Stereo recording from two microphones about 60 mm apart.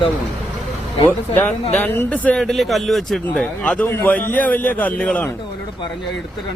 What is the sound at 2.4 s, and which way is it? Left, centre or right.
Speech, centre.